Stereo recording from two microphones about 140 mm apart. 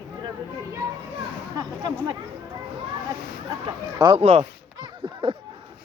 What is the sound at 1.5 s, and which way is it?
Speech, 30° right (ahead or behind).